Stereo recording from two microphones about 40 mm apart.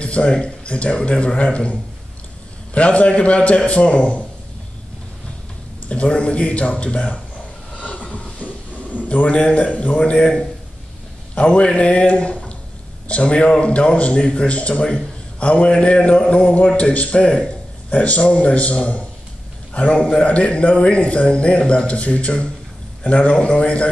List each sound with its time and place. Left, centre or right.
0.0 s a man's voice: left
5.9 s a man's voice: left
7.8 s a sound: left
9.1 s a man's voice: left
11.3 s a man's voice: left
17.8 s a man's voice: left